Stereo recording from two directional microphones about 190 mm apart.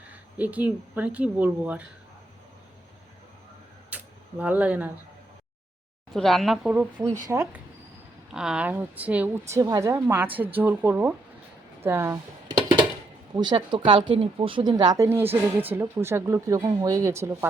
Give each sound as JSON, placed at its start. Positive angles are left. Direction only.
{"t": 0.1, "sound": "speech", "side_deg": -10}
{"t": 3.8, "sound": "a sound", "side_deg": -10}
{"t": 6.1, "sound": "speech", "side_deg": 0}
{"t": 7.3, "sound": "speech", "side_deg": -15}
{"t": 8.3, "sound": "speech", "side_deg": -5}
{"t": 11.8, "sound": "dishes", "side_deg": -15}
{"t": 13.3, "sound": "speech", "side_deg": -20}